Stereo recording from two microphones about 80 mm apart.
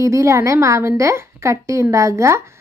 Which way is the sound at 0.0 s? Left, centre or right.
Right.